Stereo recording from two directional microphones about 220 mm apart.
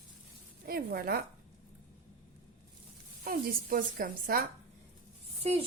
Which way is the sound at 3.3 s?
40° right (ahead or behind).